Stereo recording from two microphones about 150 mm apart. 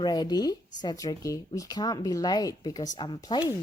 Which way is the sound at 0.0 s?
25° left (ahead or behind).